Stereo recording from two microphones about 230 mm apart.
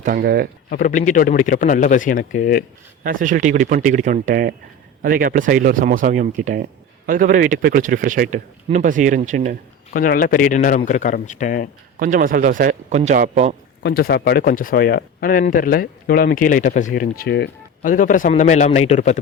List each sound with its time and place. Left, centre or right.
0.0 s speech: right
0.7 s speech: left
3.0 s speech: right
9.9 s speech: left
11.9 s speech: right
13.8 s speech: left
17.8 s speech: left